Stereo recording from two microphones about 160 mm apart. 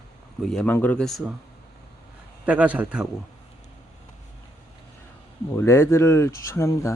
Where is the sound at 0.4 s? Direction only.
5° left (ahead or behind).